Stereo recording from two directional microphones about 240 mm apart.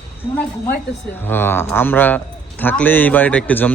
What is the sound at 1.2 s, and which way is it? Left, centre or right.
Speech, centre.